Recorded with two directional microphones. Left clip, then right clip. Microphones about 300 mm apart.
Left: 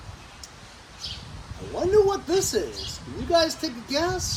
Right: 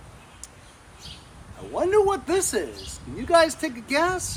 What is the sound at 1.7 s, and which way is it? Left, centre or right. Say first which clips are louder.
A woman's voice: even; right.